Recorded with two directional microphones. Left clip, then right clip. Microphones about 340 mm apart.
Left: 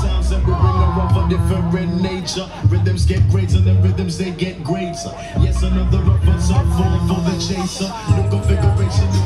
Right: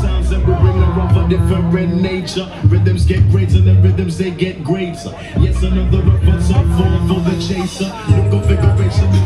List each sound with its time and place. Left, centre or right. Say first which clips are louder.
1.1 s music: right 3 dB; left